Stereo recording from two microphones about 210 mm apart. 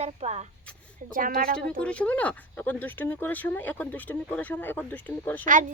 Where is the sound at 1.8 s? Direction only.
5° left (ahead or behind).